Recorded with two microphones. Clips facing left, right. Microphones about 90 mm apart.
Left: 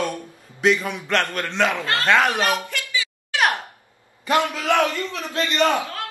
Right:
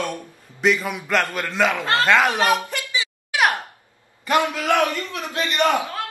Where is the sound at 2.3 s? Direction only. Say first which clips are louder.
Right 3 dB; 20° right (ahead or behind).